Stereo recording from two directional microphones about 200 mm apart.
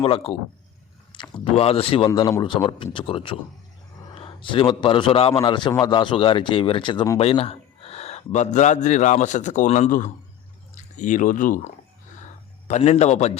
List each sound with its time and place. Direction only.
0.0 s a man's voice: 30° left (ahead or behind)